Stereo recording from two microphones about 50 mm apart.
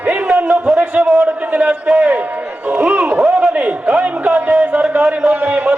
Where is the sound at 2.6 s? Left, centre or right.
Right.